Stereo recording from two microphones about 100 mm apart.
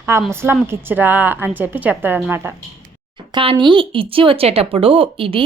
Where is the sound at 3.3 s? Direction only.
60° right (ahead or behind).